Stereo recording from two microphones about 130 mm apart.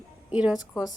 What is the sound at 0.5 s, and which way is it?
Speech, 30° left (ahead or behind).